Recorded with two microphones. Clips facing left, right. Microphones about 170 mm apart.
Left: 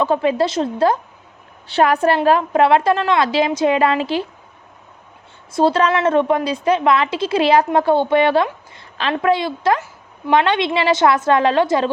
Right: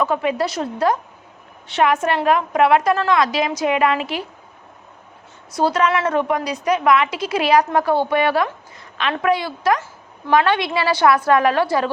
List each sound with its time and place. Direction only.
0.0 s a woman's voice: 30° left (ahead or behind)
5.5 s a woman's voice: 25° left (ahead or behind)